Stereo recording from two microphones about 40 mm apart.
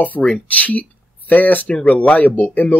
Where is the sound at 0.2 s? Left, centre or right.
Centre.